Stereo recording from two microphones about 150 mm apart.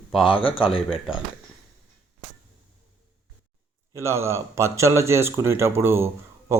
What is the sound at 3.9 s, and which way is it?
Speech, 20° right (ahead or behind).